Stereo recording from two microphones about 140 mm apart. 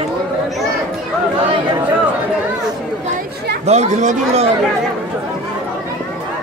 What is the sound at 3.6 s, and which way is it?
Speech, 50° right (ahead or behind).